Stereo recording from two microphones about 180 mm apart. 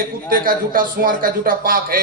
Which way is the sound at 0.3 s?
50° right (ahead or behind).